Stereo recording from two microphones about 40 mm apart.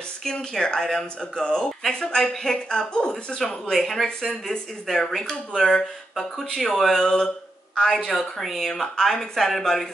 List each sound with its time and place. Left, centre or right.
0.2 s a woman's voice: centre
2.7 s a woman's voice: left
3.7 s speech: centre
6.1 s speech: centre
8.4 s speech: centre